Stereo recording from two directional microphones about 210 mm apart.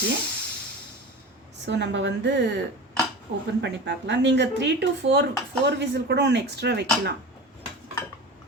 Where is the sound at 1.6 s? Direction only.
55° right (ahead or behind).